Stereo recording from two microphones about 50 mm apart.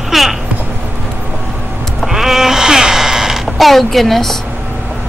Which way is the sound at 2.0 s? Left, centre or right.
Centre.